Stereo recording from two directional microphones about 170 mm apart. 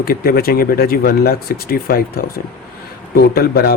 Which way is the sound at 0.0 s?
60° left (ahead or behind).